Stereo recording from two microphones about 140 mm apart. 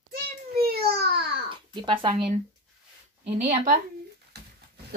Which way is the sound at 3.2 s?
45° right (ahead or behind).